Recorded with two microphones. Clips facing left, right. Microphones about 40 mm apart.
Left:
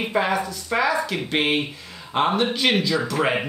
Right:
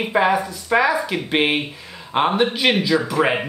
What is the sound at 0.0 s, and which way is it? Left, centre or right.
Speech, centre.